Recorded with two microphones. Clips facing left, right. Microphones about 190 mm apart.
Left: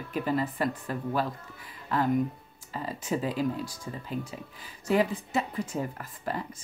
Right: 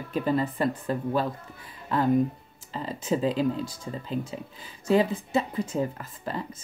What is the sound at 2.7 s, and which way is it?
Speech, 25° right (ahead or behind).